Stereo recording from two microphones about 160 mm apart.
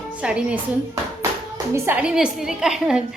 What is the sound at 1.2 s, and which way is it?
A woman's voice, 20° right (ahead or behind).